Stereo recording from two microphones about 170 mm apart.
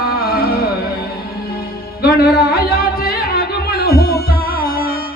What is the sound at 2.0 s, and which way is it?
Music, 65° left (ahead or behind).